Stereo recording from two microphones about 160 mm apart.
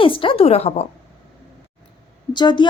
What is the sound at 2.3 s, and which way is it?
Speech, 30° left (ahead or behind).